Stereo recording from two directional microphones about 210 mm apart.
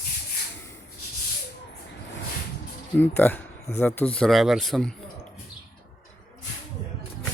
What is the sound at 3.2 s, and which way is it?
Speech, 10° left (ahead or behind).